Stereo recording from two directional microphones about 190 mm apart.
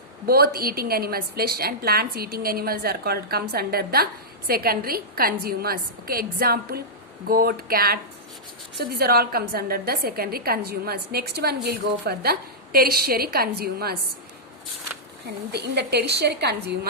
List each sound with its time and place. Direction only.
0.3 s a woman's voice: 55° right (ahead or behind)
15.5 s a woman's voice: 60° right (ahead or behind)